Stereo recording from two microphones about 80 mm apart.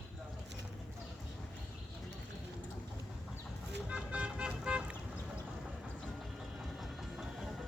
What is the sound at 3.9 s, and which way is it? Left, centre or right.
Vehicle, centre.